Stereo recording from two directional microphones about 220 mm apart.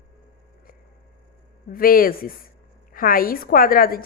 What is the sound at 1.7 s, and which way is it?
A woman's voice, 40° left (ahead or behind).